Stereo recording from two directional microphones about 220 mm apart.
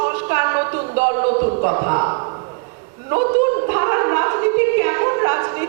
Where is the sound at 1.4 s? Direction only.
20° right (ahead or behind).